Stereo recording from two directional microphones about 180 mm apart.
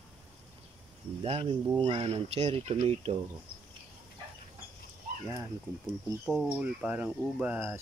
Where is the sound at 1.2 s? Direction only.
35° right (ahead or behind).